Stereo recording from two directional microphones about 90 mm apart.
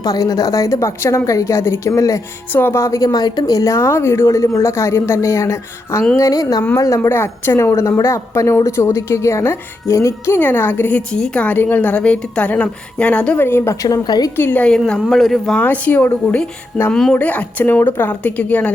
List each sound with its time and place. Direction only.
0.0 s a woman's voice: 40° left (ahead or behind)
2.5 s a woman's voice: 20° left (ahead or behind)
10.3 s a woman's voice: 20° left (ahead or behind)
13.4 s speech: 25° left (ahead or behind)
13.8 s a woman's voice: 45° left (ahead or behind)
14.3 s speech: 20° left (ahead or behind)
15.0 s speech: centre (ahead or behind)
15.5 s speech: 20° left (ahead or behind)
16.9 s a woman's voice: 10° left (ahead or behind)